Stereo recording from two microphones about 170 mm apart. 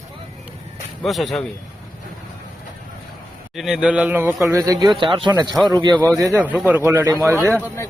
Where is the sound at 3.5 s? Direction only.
5° right (ahead or behind); by 5.9 s 25° right (ahead or behind).